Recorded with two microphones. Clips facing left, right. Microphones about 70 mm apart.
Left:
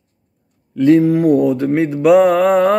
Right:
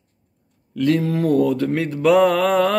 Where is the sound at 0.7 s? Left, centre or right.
Centre.